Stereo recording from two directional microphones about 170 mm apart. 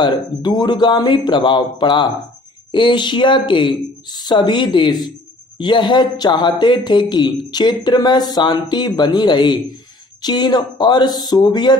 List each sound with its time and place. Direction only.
0.0 s speech: 25° left (ahead or behind)